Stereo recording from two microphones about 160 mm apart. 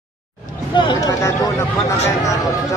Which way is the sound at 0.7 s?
30° left (ahead or behind).